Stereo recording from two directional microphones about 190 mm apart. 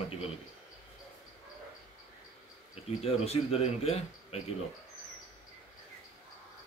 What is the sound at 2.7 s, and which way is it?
Speech, 30° left (ahead or behind).